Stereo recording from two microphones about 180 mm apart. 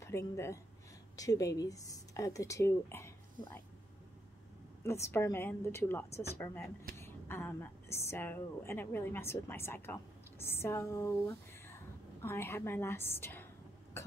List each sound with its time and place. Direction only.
0.0 s speech: 15° left (ahead or behind)
4.8 s a woman's voice: 15° left (ahead or behind)
14.0 s cough: 15° left (ahead or behind)